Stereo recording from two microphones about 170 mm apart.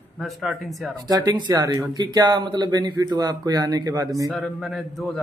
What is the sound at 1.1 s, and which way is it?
Speech, 25° right (ahead or behind).